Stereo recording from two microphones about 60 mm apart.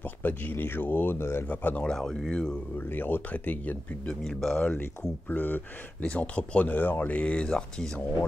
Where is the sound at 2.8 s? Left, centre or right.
Left.